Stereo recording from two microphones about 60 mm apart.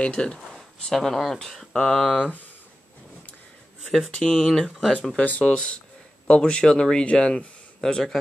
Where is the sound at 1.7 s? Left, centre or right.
Centre.